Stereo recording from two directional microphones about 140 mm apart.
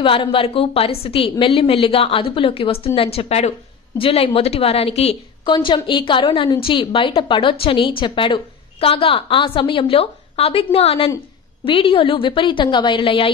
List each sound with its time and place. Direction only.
0.0 s a woman's voice: 40° left (ahead or behind)